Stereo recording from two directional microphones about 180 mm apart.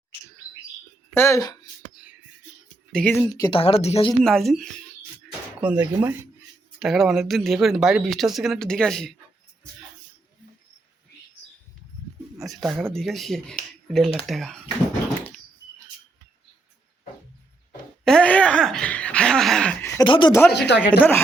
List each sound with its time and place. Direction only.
1.1 s speech: 15° left (ahead or behind)
2.9 s speech: 10° left (ahead or behind)
3.6 s speech: 35° left (ahead or behind)
4.2 s speech: centre (ahead or behind)
12.4 s speech: centre (ahead or behind)
18.0 s a sound: 5° left (ahead or behind)
19.8 s a sound: 25° left (ahead or behind)
20.6 s speech: 70° left (ahead or behind)